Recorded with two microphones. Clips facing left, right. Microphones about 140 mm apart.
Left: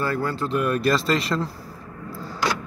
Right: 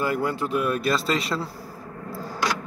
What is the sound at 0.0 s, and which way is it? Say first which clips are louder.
Speech: even; 15° right (ahead or behind).